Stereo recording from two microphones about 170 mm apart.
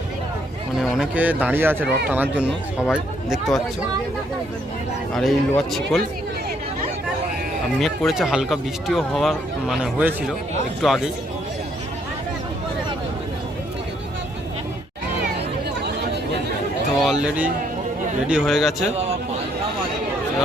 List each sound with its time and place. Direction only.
0.8 s speech: 5° right (ahead or behind)
5.1 s speech: centre (ahead or behind)
7.8 s speech: centre (ahead or behind)
17.0 s speech: 5° right (ahead or behind)
18.9 s a sound: 40° right (ahead or behind)